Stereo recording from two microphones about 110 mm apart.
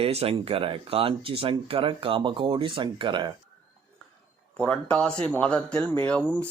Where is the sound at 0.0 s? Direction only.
65° right (ahead or behind); by 3.3 s 45° right (ahead or behind).